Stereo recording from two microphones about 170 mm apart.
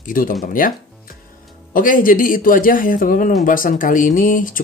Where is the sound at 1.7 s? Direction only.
55° left (ahead or behind).